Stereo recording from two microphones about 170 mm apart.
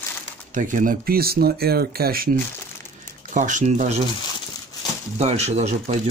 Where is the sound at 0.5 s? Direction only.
50° right (ahead or behind).